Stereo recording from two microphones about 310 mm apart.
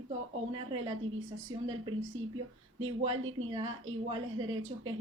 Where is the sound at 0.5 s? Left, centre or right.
Centre.